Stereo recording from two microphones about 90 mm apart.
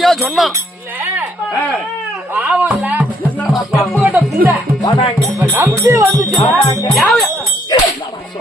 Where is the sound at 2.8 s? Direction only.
20° right (ahead or behind).